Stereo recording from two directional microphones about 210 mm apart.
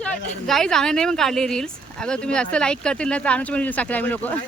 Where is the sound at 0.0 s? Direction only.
5° left (ahead or behind).